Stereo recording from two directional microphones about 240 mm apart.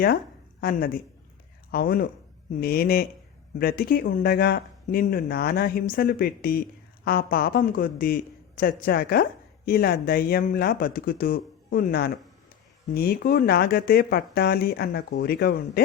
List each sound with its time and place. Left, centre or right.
0.6 s speech: left